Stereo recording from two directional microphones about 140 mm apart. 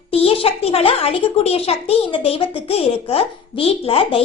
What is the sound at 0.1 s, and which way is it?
A woman's voice, 45° left (ahead or behind).